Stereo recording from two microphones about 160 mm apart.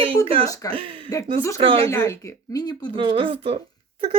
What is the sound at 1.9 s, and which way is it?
Speech, 15° left (ahead or behind).